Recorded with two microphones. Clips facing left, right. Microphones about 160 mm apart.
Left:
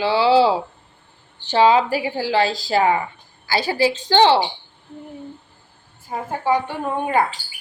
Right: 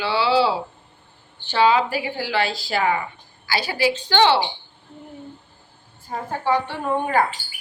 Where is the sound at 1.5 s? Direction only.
35° left (ahead or behind).